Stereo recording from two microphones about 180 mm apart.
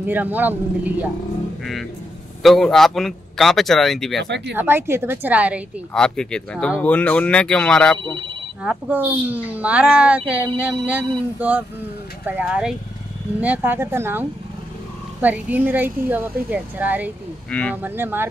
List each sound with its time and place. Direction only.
0.0 s speech: 10° right (ahead or behind)
4.2 s speech: 70° right (ahead or behind)
4.6 s speech: 10° right (ahead or behind)
5.9 s speech: 5° left (ahead or behind)
8.0 s speech: 25° right (ahead or behind)
8.6 s speech: 10° right (ahead or behind)
17.5 s speech: 5° left (ahead or behind)
17.8 s speech: 10° right (ahead or behind)